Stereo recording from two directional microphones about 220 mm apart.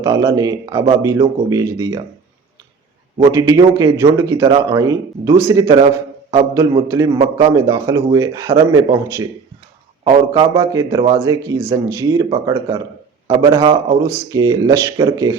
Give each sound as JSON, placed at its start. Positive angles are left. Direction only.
{"t": 0.0, "sound": "speech", "side_deg": -15}
{"t": 3.3, "sound": "speech", "side_deg": -15}